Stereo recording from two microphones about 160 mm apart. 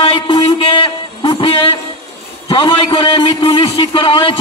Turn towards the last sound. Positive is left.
turn(degrees=35)  # may be behind; listen again after turning